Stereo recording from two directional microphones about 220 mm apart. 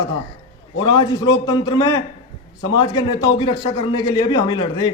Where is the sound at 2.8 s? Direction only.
20° left (ahead or behind).